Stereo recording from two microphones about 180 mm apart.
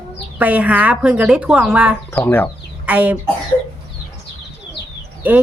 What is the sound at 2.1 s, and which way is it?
Speech, 10° left (ahead or behind).